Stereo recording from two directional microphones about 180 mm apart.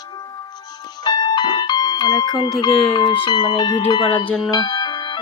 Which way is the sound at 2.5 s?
25° left (ahead or behind).